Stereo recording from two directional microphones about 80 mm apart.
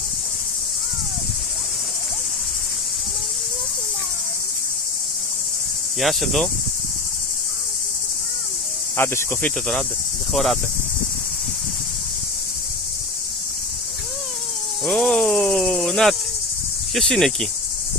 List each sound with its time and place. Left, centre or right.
5.9 s speech: centre
8.9 s cricket: left
10.3 s speech: centre
14.9 s cricket: centre
16.9 s speech: centre